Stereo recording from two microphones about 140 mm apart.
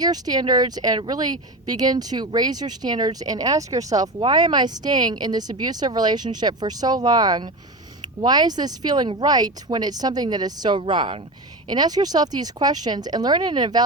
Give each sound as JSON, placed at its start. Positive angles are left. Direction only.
{"t": 0.0, "sound": "speech", "side_deg": -30}